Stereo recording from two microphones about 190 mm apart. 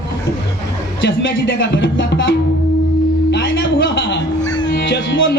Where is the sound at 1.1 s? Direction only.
70° left (ahead or behind).